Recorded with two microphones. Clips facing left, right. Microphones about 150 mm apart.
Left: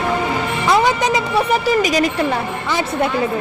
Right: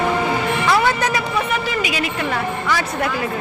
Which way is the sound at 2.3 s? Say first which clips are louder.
Left 1 dB; 25° left (ahead or behind).